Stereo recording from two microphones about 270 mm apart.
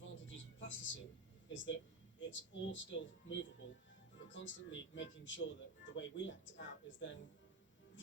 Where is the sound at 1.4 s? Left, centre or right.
Left.